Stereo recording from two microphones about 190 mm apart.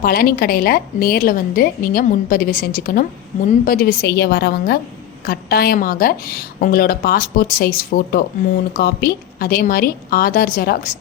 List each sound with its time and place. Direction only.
0.0 s a woman's voice: 50° left (ahead or behind)